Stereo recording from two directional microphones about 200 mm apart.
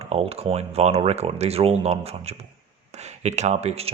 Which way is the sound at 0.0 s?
30° right (ahead or behind).